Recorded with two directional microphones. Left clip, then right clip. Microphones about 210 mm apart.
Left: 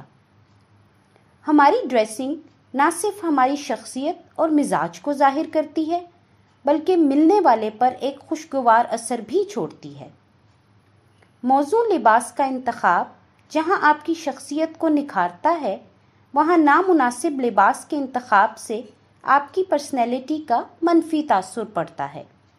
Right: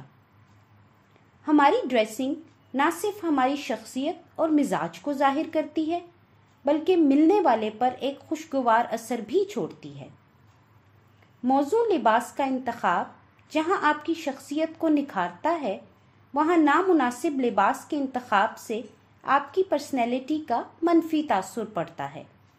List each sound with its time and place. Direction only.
1.4 s a woman's voice: 20° left (ahead or behind)
11.4 s a woman's voice: 20° left (ahead or behind)